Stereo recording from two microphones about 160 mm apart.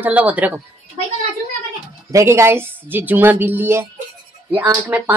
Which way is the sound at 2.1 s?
20° right (ahead or behind).